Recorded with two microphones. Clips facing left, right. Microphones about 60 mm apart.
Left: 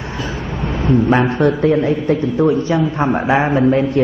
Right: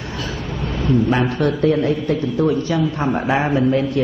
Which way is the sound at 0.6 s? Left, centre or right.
Left.